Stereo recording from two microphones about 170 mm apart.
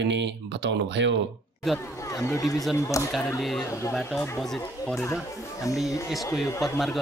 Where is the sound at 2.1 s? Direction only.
20° left (ahead or behind).